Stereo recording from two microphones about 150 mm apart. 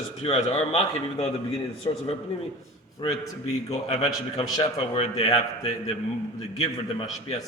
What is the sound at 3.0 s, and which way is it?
A man's voice, 35° left (ahead or behind).